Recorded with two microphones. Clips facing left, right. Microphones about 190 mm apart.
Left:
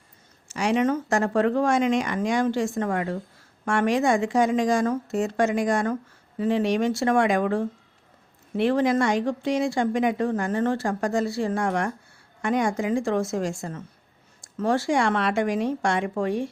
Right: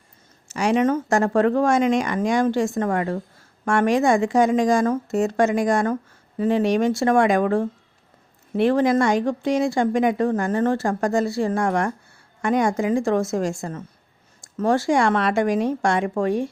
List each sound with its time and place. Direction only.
0.4 s speech: 45° right (ahead or behind)